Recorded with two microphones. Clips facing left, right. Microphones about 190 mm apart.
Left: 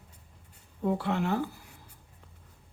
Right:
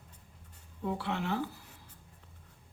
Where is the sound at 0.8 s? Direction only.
45° left (ahead or behind).